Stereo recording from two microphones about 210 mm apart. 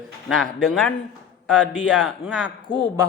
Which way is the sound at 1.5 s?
5° left (ahead or behind).